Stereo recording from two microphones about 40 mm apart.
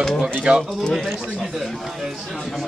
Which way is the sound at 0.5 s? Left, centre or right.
Right.